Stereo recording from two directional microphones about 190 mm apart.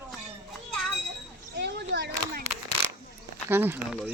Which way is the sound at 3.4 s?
10° right (ahead or behind).